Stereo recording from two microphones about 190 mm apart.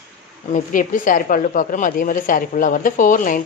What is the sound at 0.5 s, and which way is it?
Speech, 45° left (ahead or behind).